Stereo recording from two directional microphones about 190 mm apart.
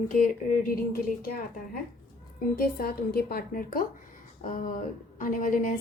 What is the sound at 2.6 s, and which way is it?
A woman's voice, 50° left (ahead or behind).